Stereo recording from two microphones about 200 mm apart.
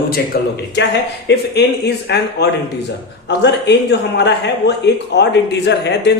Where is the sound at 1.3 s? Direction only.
60° left (ahead or behind).